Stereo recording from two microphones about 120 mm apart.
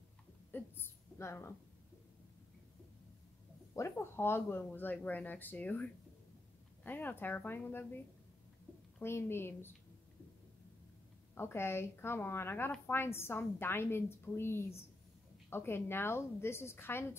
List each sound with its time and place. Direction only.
0.5 s a sound: 15° left (ahead or behind)
3.7 s speech: 20° left (ahead or behind)
9.0 s a woman's voice: 20° left (ahead or behind)
11.3 s a woman's voice: 20° left (ahead or behind)